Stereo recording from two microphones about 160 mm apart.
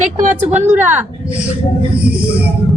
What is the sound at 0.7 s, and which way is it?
Speech, 10° right (ahead or behind).